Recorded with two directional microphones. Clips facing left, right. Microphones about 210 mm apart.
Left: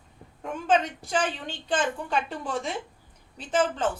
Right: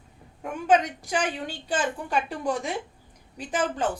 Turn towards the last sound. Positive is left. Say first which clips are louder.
# left 1 dB
turn(degrees=-15)  # may be behind; listen again after turning